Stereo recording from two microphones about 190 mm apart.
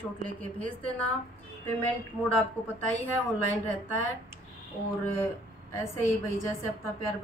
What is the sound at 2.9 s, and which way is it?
A woman's voice, 10° left (ahead or behind).